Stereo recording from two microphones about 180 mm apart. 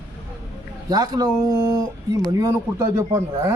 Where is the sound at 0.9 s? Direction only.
20° right (ahead or behind).